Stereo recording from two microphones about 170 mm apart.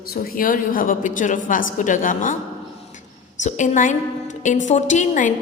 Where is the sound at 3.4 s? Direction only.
45° left (ahead or behind).